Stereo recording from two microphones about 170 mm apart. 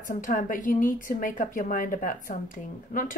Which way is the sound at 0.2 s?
50° left (ahead or behind).